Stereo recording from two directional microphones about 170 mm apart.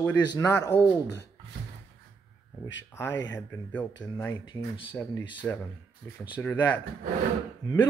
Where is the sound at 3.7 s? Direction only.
10° left (ahead or behind).